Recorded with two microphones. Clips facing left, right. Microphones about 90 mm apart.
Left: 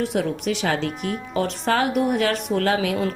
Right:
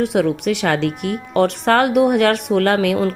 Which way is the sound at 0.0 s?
65° right (ahead or behind).